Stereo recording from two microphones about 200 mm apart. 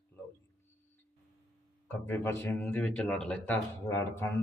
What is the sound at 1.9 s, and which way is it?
Speech, 10° left (ahead or behind).